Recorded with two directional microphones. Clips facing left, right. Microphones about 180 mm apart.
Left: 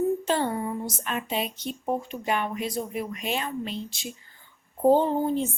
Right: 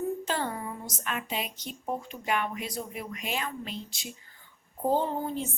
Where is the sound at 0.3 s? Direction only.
25° left (ahead or behind).